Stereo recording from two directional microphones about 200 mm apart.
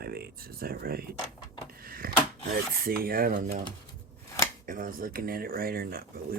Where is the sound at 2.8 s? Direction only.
50° right (ahead or behind).